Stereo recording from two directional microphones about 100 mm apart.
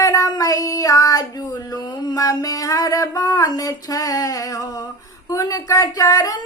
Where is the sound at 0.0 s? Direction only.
35° left (ahead or behind).